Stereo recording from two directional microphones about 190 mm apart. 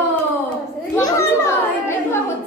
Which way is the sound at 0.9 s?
15° left (ahead or behind).